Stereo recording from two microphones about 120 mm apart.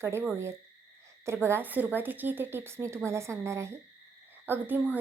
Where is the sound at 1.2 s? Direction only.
20° right (ahead or behind).